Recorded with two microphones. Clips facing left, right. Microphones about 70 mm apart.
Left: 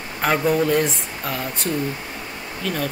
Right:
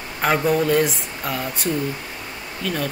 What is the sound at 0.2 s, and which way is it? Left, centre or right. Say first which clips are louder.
Speech: even; centre.